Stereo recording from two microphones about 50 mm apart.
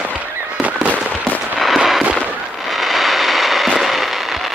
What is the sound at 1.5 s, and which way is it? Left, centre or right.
Firecracker, centre.